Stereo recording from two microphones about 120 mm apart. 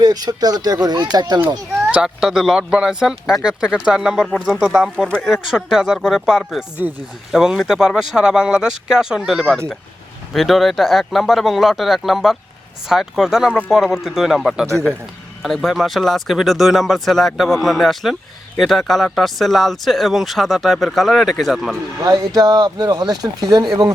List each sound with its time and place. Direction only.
0.0 s speech: 35° right (ahead or behind)
1.9 s speech: 5° right (ahead or behind)
22.0 s speech: 30° right (ahead or behind)